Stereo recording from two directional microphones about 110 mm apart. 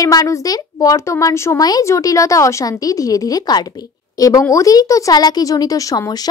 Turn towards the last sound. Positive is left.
turn(degrees=35)  # may be behind; listen again after turning